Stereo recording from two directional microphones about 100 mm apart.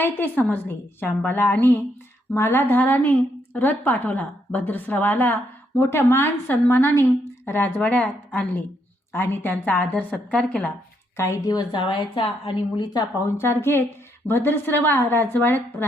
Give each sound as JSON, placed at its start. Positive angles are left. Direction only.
{"t": 0.0, "sound": "a woman's voice", "side_deg": 20}
{"t": 11.2, "sound": "speech", "side_deg": 35}
{"t": 11.7, "sound": "a woman's voice", "side_deg": 55}
{"t": 13.2, "sound": "a woman's voice", "side_deg": 25}